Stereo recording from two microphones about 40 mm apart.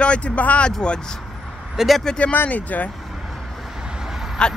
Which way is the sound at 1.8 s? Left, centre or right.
Centre.